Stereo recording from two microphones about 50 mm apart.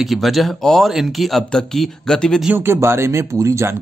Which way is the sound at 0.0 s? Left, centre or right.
Centre.